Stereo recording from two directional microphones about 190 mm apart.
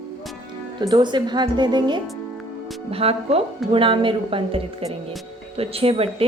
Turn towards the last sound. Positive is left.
turn(degrees=-30)  # may be behind; listen again after turning